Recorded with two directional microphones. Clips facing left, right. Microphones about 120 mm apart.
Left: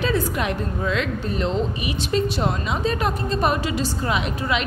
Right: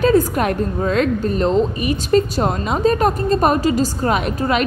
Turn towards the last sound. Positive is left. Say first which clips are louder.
# right 6 dB
turn(degrees=-50)  # may be behind; listen again after turning